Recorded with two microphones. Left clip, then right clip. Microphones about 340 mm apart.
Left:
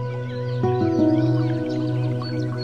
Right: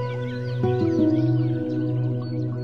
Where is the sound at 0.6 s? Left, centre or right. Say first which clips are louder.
Left 1 dB; centre.